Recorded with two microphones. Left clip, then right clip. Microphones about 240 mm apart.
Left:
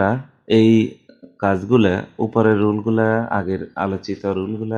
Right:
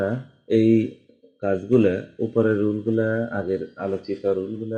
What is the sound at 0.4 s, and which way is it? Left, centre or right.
Speech, left.